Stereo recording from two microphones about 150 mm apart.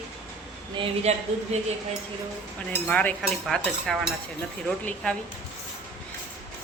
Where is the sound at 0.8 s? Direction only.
40° right (ahead or behind).